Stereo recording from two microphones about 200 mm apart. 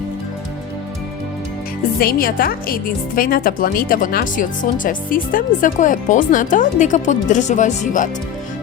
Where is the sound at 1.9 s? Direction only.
50° left (ahead or behind).